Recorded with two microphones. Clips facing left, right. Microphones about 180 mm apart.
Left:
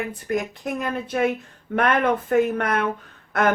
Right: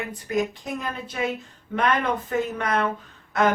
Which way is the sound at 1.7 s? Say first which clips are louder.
Left 3 dB; 55° left (ahead or behind).